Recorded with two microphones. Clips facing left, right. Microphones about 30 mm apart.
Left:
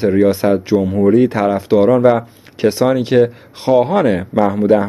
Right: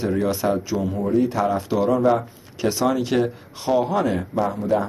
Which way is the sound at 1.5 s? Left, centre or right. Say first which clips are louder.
Left 9 dB; left.